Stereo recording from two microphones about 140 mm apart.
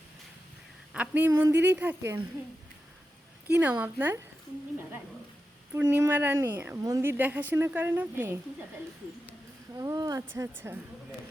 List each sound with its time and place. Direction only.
0.9 s speech: 10° right (ahead or behind)
3.4 s speech: 10° right (ahead or behind)
5.7 s speech: 15° right (ahead or behind)
9.7 s speech: 25° right (ahead or behind)